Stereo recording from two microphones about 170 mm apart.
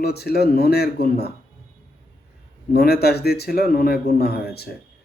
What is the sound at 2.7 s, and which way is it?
Speech, 65° left (ahead or behind).